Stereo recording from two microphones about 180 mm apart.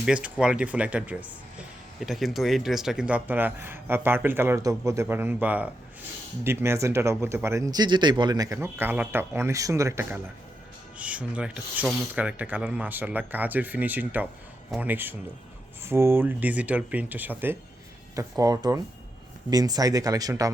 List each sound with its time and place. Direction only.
0.0 s speech: 5° right (ahead or behind)